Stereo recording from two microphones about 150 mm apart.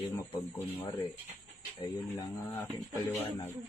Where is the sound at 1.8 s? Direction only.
25° left (ahead or behind).